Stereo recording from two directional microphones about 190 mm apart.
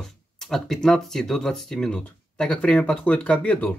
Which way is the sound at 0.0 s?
Centre (ahead or behind).